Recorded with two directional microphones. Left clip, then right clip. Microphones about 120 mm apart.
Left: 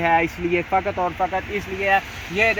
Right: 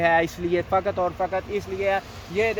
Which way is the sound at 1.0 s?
30° right (ahead or behind).